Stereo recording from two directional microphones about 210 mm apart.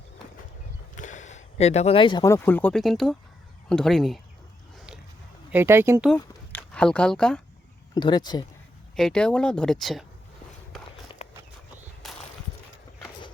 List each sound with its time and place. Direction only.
0.9 s speech: 35° left (ahead or behind); by 4.2 s centre (ahead or behind)
5.5 s speech: 10° right (ahead or behind)
6.1 s a sound: 5° left (ahead or behind)
7.9 s speech: 20° left (ahead or behind)
9.0 s speech: 5° left (ahead or behind)
11.2 s horse: 30° left (ahead or behind)